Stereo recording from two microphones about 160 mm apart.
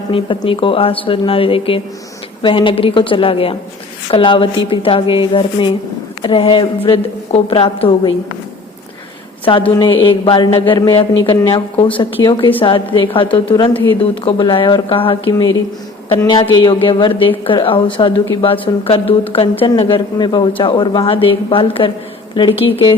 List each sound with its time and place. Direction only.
0.1 s speech: 35° left (ahead or behind)
9.4 s a woman's voice: 30° left (ahead or behind)